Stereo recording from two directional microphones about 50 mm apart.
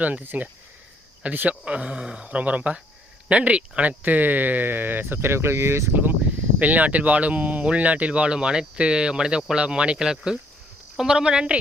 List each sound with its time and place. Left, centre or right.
0.0 s speech: right
1.6 s speech: right
5.9 s speech: right
6.6 s speech: right